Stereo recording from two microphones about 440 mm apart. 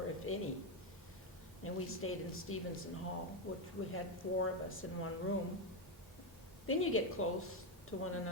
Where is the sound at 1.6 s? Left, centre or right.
Left.